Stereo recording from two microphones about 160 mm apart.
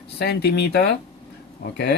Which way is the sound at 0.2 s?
90° left.